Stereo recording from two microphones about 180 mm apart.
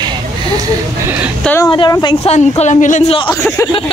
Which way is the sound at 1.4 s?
5° left (ahead or behind).